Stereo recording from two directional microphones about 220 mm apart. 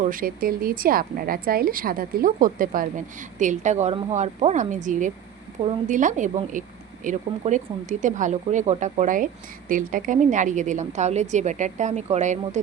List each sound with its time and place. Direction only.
0.0 s speech: 40° right (ahead or behind)